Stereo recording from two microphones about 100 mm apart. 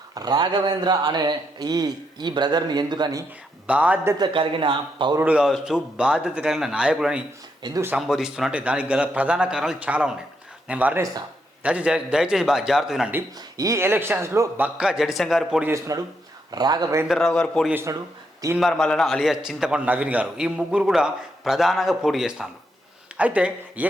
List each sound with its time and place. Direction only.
0.1 s speech: 40° right (ahead or behind)
3.7 s a man's voice: 15° right (ahead or behind)
4.3 s a man's voice: 60° right (ahead or behind)
5.2 s a man's voice: 10° right (ahead or behind)
7.6 s speech: 45° right (ahead or behind)
7.9 s a man's voice: 5° right (ahead or behind)
13.6 s a man's voice: 30° right (ahead or behind)
14.6 s a man's voice: 5° right (ahead or behind)
15.9 s speech: 35° right (ahead or behind)
17.1 s a man's voice: 5° left (ahead or behind)
23.1 s speech: 15° right (ahead or behind)